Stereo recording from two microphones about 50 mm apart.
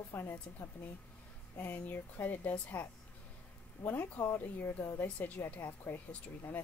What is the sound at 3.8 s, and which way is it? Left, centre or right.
Speech, left.